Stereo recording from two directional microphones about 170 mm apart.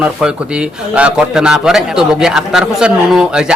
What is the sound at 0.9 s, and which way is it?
A man's voice, 5° right (ahead or behind).